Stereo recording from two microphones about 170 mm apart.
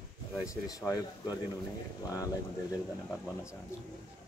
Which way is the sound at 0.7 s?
20° left (ahead or behind).